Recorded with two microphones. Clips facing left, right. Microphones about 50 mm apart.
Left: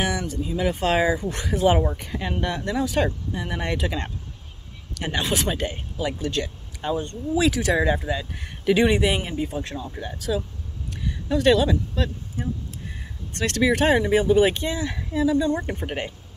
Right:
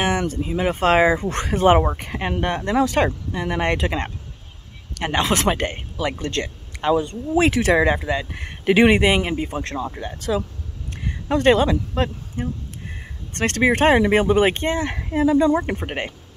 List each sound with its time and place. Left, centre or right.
0.2 s speech: right
1.1 s speech: right
15.6 s speech: right